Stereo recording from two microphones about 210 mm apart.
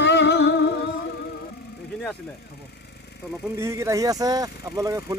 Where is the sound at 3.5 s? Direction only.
15° right (ahead or behind).